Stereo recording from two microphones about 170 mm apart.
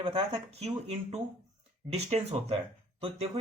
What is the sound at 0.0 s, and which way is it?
Speech, 30° right (ahead or behind).